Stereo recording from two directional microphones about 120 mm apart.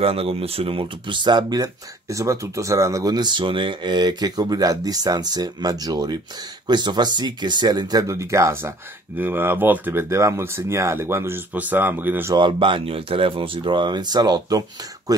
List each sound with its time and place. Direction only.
0.0 s speech: 50° right (ahead or behind); by 12.4 s 15° right (ahead or behind)
12.4 s speech: 40° right (ahead or behind)